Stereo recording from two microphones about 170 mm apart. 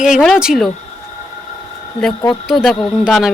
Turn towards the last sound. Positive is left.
turn(degrees=0)  # may be behind; listen again after turning